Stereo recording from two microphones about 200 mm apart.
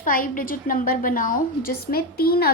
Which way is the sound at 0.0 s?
45° left (ahead or behind).